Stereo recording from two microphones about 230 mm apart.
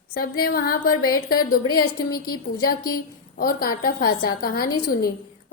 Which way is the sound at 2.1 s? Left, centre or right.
Centre.